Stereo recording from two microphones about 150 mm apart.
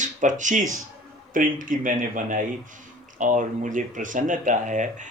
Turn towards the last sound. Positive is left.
turn(degrees=-55)  # may be behind; listen again after turning